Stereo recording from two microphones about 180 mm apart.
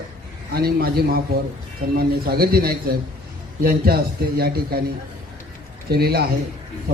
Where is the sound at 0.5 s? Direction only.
60° right (ahead or behind).